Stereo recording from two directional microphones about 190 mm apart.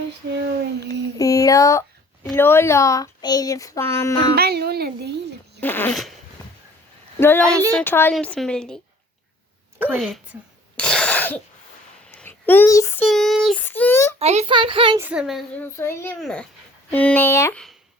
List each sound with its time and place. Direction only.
1.2 s a sound: 20° left (ahead or behind)
2.3 s speech: 10° left (ahead or behind)
4.4 s a sound: 55° right (ahead or behind)
5.5 s speech: 10° left (ahead or behind)
7.2 s speech: 10° left (ahead or behind)
7.4 s speech: 15° right (ahead or behind)
7.7 s a woman's voice: 10° left (ahead or behind)
9.7 s a sound: 10° right (ahead or behind)
10.8 s cough: 5° left (ahead or behind)
12.1 s a sound: 10° left (ahead or behind)
13.1 s speech: centre (ahead or behind)
14.2 s a child's voice: 35° right (ahead or behind)
14.9 s a woman's voice: 10° right (ahead or behind)
15.6 s a woman's voice: 15° left (ahead or behind)